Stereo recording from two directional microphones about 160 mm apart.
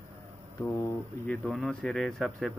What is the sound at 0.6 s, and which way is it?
Speech, 15° left (ahead or behind).